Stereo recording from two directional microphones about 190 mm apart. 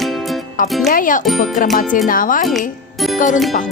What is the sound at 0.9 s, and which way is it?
A child's voice, 45° left (ahead or behind).